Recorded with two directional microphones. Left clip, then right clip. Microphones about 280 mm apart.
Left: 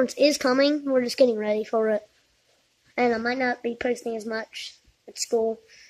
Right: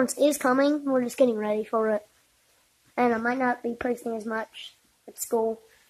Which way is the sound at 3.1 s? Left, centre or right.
Right.